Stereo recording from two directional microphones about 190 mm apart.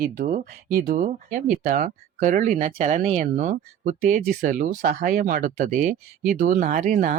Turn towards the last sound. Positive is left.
turn(degrees=-40)  # may be behind; listen again after turning